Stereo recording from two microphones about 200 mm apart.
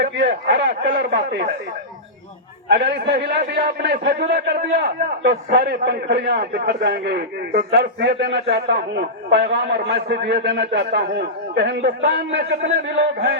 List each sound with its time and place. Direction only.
0.0 s a man's voice: 55° right (ahead or behind)
2.6 s a man's voice: 60° right (ahead or behind)